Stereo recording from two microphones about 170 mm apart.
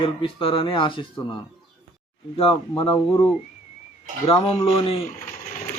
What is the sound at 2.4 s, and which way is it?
Speech, 35° left (ahead or behind).